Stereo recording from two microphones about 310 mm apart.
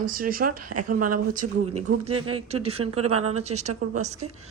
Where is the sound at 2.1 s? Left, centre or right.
Right.